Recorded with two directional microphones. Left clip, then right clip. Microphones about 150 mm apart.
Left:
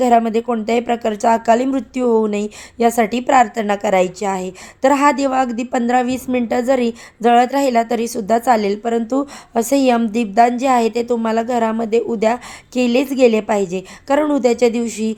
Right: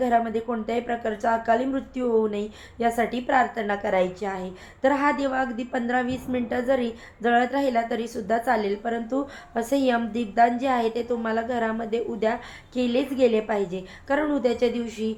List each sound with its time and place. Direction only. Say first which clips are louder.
0.0 s speech: left 9 dB; 35° left (ahead or behind)